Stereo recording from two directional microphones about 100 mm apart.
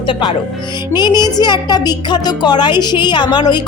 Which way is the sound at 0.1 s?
50° left (ahead or behind).